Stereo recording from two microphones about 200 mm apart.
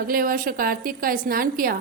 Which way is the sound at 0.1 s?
45° right (ahead or behind).